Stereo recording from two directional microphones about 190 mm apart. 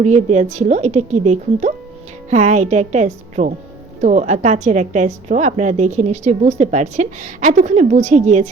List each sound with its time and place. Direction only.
0.0 s a woman's voice: 35° right (ahead or behind)